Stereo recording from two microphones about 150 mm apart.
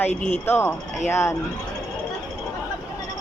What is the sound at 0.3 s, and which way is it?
Speech, 15° left (ahead or behind).